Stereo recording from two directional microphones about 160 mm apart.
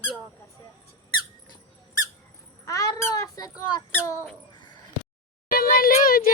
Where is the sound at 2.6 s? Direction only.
20° left (ahead or behind).